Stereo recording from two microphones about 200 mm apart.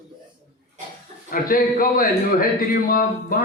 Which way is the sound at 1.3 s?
45° left (ahead or behind).